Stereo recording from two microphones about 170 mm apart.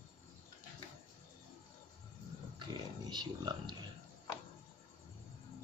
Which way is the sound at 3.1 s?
25° right (ahead or behind).